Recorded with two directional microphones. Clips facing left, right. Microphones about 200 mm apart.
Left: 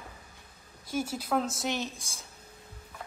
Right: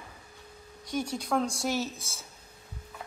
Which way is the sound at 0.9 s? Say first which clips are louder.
Even; 5° left (ahead or behind).